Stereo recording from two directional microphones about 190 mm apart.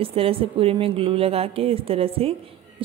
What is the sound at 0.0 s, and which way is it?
Speech, 30° right (ahead or behind).